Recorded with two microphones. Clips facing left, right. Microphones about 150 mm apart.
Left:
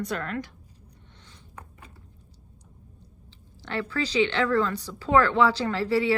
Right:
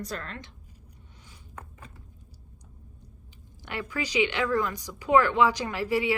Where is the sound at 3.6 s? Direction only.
15° right (ahead or behind).